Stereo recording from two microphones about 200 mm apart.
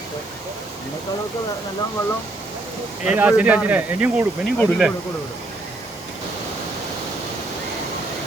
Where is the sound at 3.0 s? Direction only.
5° right (ahead or behind).